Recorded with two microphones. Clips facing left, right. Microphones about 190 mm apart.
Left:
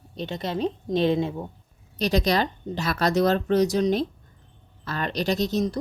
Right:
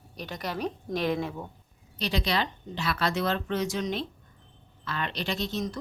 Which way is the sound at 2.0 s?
45° left (ahead or behind).